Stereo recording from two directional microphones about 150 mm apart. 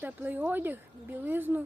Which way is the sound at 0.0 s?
10° right (ahead or behind).